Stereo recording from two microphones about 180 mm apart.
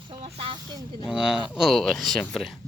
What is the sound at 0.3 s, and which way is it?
Speech, 25° right (ahead or behind).